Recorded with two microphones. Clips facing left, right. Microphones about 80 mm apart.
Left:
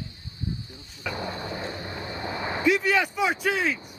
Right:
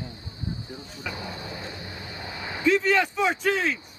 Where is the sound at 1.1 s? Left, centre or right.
Left.